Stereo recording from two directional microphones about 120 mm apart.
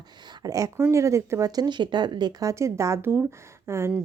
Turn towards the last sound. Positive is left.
turn(degrees=-20)  # may be behind; listen again after turning